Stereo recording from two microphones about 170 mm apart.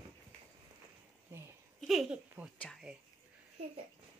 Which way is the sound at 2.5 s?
5° left (ahead or behind).